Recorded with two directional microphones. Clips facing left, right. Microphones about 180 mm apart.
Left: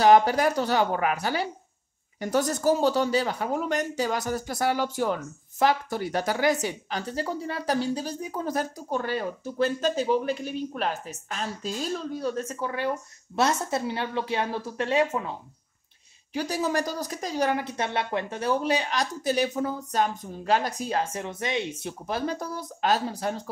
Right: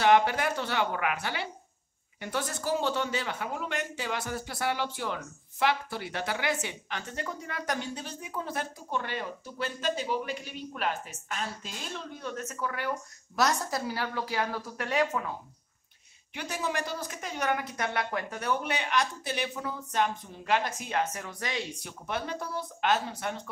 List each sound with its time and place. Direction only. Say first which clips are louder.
0.0 s a woman's voice: left 5 dB; 40° left (ahead or behind)
16.3 s speech: left 6 dB; 35° left (ahead or behind)
22.0 s speech: left 4 dB; 35° left (ahead or behind)